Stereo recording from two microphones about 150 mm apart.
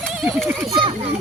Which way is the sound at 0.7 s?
30° right (ahead or behind).